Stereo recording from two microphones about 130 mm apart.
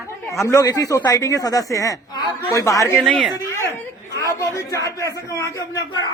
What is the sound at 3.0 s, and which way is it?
Speech, centre (ahead or behind).